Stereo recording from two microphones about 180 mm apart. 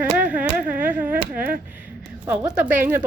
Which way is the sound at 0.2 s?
10° right (ahead or behind).